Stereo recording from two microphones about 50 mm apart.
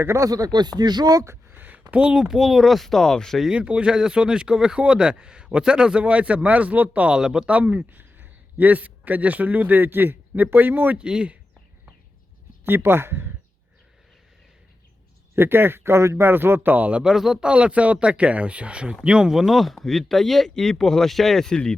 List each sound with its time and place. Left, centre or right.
0.0 s speech: right
1.5 s a sound: right
2.1 s speech: centre
3.5 s speech: right
7.1 s speech: centre
7.4 s a man's voice: right
10.9 s speech: centre
12.6 s speech: right
15.4 s speech: right
16.3 s speech: right
17.0 s speech: centre
17.4 s speech: right; by 21.8 s centre